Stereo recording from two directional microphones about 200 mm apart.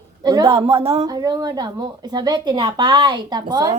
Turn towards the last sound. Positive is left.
turn(degrees=-20)  # may be behind; listen again after turning